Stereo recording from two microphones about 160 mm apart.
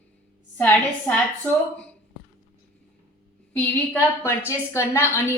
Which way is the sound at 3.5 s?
10° left (ahead or behind).